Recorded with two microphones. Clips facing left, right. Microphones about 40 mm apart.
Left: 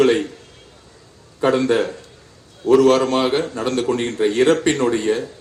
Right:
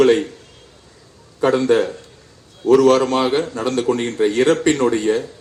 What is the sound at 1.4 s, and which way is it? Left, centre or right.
Speech, left.